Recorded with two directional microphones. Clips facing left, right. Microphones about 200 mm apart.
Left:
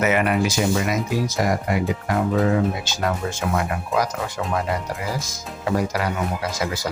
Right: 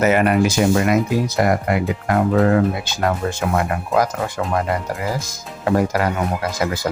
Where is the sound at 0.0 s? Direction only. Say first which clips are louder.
Right 4 dB; 40° right (ahead or behind).